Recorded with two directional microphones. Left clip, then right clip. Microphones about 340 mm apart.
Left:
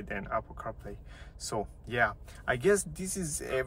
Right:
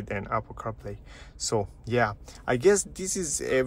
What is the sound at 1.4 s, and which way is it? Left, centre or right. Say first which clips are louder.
Speech: right 7 dB; centre.